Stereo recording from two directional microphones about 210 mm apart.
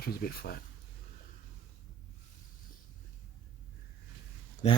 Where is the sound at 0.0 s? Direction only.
45° left (ahead or behind).